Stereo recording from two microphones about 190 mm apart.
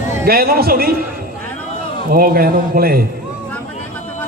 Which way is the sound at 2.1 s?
50° right (ahead or behind).